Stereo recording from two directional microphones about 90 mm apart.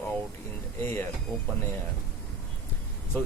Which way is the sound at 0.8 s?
25° left (ahead or behind).